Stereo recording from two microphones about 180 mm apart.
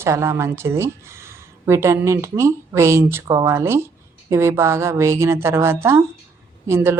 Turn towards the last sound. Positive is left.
turn(degrees=-15)  # may be behind; listen again after turning